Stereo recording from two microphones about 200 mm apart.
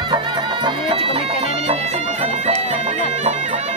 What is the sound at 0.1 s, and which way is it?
Bagpipes, 25° right (ahead or behind).